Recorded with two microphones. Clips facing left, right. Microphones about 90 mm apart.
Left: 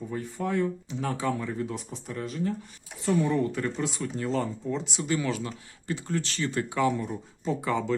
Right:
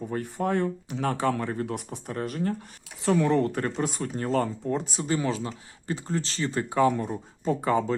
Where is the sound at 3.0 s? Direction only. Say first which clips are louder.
Right 3 dB; 70° right (ahead or behind).